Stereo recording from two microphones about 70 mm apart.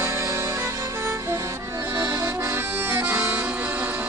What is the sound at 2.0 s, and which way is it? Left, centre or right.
Accordion, right.